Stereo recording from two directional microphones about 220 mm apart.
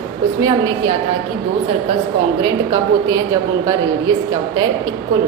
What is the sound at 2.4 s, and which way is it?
Speech, 15° right (ahead or behind).